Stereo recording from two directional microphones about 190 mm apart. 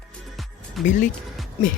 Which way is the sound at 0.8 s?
40° left (ahead or behind).